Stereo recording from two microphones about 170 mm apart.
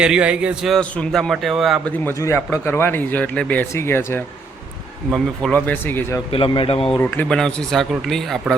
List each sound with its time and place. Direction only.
0.0 s a man's voice: 5° right (ahead or behind)
2.0 s speech: 15° left (ahead or behind)
6.3 s speech: 30° left (ahead or behind)
7.0 s a man's voice: 10° left (ahead or behind)